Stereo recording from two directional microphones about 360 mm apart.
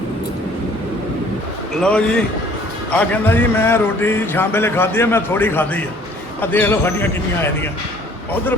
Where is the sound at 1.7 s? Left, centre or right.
Centre.